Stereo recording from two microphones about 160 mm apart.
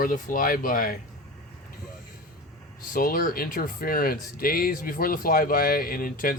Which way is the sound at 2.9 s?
60° left (ahead or behind).